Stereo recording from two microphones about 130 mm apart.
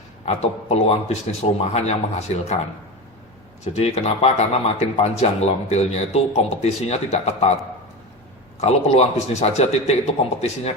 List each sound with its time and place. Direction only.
0.3 s a man's voice: 55° left (ahead or behind)
3.6 s a man's voice: 55° left (ahead or behind)
8.6 s a man's voice: 60° left (ahead or behind)